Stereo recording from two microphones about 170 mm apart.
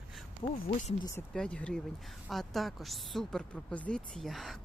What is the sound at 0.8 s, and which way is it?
Speech, 45° left (ahead or behind).